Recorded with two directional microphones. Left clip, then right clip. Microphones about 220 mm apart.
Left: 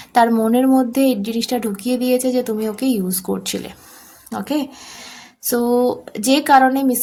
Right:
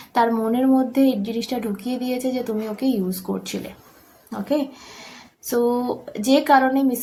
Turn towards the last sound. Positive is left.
turn(degrees=50)  # may be behind; listen again after turning